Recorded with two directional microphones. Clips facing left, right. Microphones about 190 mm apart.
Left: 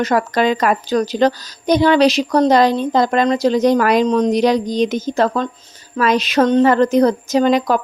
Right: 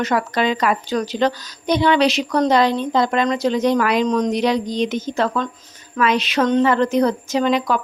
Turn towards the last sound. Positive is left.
turn(degrees=40)  # may be behind; listen again after turning